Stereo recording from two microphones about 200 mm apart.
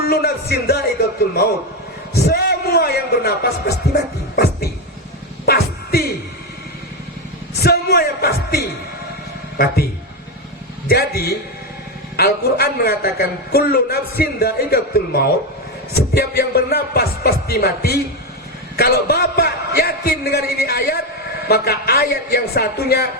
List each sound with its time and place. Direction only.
0.0 s a man's voice: 50° left (ahead or behind)
2.2 s music: 55° left (ahead or behind)
5.5 s music: 50° left (ahead or behind)
7.6 s speech: 50° left (ahead or behind)
10.8 s a man's voice: 50° left (ahead or behind)